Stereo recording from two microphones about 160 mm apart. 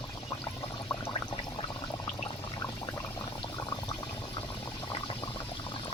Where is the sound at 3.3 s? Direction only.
30° left (ahead or behind).